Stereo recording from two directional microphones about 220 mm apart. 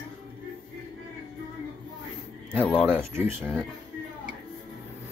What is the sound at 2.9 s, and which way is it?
Speech, 10° right (ahead or behind).